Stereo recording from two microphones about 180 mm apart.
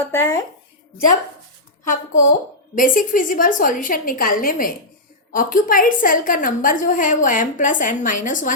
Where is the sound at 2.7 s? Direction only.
50° left (ahead or behind).